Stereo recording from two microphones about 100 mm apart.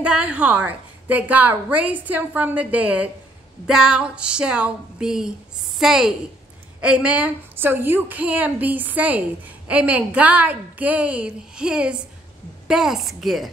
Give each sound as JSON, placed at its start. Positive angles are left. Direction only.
{"t": 0.0, "sound": "a woman's voice", "side_deg": -10}